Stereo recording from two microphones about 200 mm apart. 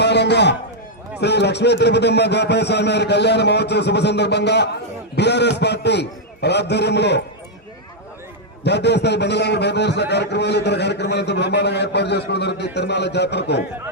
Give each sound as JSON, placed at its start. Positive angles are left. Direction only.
{"t": 0.0, "sound": "a man's voice", "side_deg": 60}
{"t": 8.6, "sound": "a man's voice", "side_deg": 60}